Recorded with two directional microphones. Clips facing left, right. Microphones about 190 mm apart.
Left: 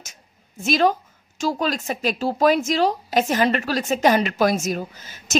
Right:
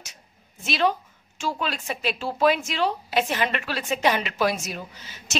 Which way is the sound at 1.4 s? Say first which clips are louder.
Left 6 dB; 40° left (ahead or behind).